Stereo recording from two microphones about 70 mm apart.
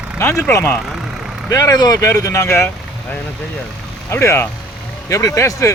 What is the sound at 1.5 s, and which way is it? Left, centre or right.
Speech, left.